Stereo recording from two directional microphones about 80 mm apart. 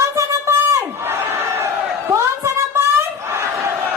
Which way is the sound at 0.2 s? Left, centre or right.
Right.